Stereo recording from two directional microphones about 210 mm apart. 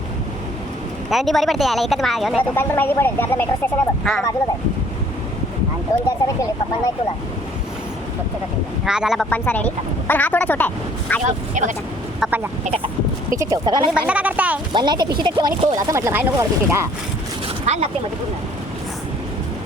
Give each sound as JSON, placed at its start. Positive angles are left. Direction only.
{"t": 1.1, "sound": "speech", "side_deg": 0}
{"t": 2.6, "sound": "speech", "side_deg": 10}
{"t": 6.1, "sound": "speech", "side_deg": 15}
{"t": 8.8, "sound": "speech", "side_deg": -5}
{"t": 11.2, "sound": "speech", "side_deg": -35}
{"t": 12.2, "sound": "speech", "side_deg": -10}
{"t": 12.6, "sound": "speech", "side_deg": -30}
{"t": 13.3, "sound": "speech", "side_deg": -15}
{"t": 14.1, "sound": "speech", "side_deg": -5}
{"t": 14.7, "sound": "speech", "side_deg": -20}
{"t": 17.7, "sound": "speech", "side_deg": -30}